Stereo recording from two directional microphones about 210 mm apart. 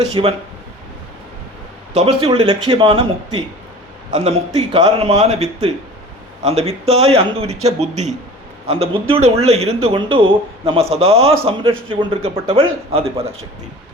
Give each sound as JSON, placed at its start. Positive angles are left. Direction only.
{"t": 0.0, "sound": "a man's voice", "side_deg": -25}
{"t": 1.9, "sound": "a man's voice", "side_deg": -30}